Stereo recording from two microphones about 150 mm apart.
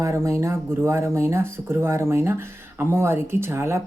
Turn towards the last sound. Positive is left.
turn(degrees=-15)  # may be behind; listen again after turning